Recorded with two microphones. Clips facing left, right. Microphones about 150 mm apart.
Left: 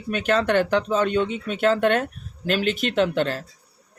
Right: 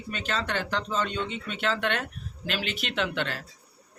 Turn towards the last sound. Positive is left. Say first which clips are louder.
# left 8 dB
turn(degrees=40)  # may be behind; listen again after turning